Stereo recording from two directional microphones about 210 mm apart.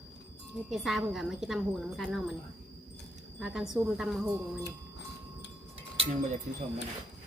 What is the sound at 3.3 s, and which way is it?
Speech, centre (ahead or behind).